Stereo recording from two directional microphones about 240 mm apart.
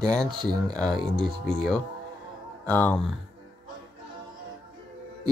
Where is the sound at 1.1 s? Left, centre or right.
Centre.